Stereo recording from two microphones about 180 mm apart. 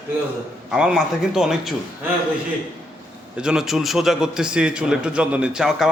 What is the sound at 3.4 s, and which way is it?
A man's voice, 5° right (ahead or behind).